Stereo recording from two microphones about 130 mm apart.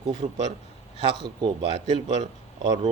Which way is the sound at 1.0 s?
35° right (ahead or behind).